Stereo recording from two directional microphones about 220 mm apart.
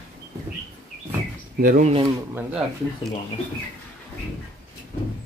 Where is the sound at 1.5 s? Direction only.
40° right (ahead or behind).